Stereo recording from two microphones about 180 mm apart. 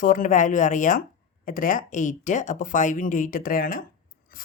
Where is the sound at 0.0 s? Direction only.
45° left (ahead or behind).